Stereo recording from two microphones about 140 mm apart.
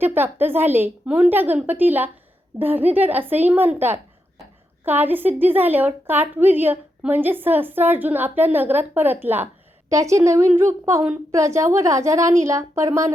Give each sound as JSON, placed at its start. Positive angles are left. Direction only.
{"t": 0.0, "sound": "a woman's voice", "side_deg": -15}